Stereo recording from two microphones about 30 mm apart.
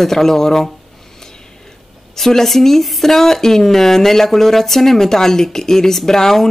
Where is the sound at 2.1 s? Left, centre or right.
Centre.